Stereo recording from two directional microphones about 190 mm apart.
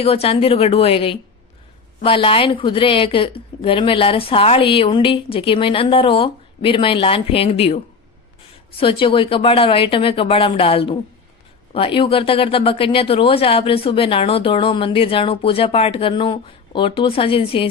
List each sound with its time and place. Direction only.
0.0 s a woman's voice: 30° left (ahead or behind)
8.8 s speech: 25° left (ahead or behind)